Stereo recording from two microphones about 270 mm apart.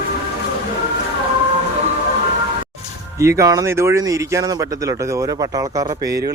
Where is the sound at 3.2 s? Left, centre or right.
Centre.